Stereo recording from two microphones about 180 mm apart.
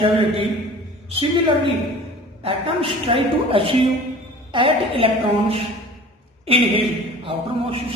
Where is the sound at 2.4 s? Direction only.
30° right (ahead or behind).